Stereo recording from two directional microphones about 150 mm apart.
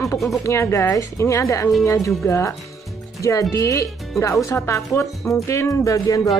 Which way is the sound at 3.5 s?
20° left (ahead or behind).